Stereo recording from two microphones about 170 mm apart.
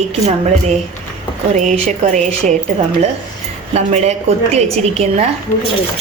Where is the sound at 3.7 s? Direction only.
40° right (ahead or behind).